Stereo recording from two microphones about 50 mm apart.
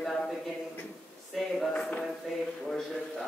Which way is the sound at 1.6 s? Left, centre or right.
Centre.